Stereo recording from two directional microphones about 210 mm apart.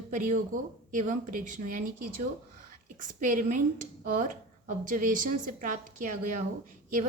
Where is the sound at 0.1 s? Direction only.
40° right (ahead or behind).